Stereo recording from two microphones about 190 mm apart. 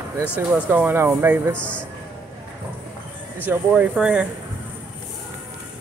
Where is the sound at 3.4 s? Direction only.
5° right (ahead or behind).